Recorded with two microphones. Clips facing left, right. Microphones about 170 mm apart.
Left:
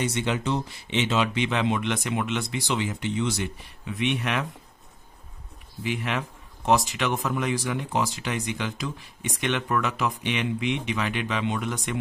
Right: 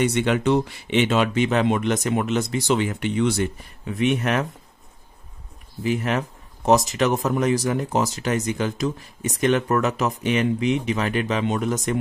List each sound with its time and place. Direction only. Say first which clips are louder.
0.0 s speech: right 6 dB; 60° right (ahead or behind); by 4.5 s 45° right (ahead or behind)
5.9 s speech: right 6 dB; 40° right (ahead or behind)